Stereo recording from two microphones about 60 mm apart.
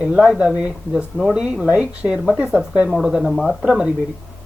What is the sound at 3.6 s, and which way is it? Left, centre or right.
Speech, centre.